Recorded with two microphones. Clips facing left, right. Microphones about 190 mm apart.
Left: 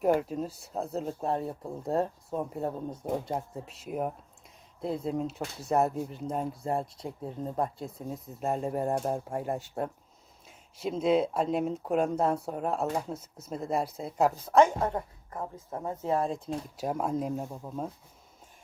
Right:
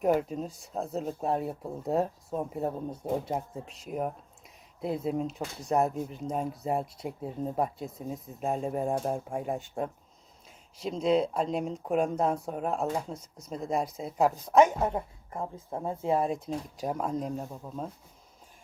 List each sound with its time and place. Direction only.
0.0 s a woman's voice: centre (ahead or behind)
15.4 s speech: 25° right (ahead or behind)
15.8 s a woman's voice: 15° right (ahead or behind)
16.7 s speech: 5° left (ahead or behind)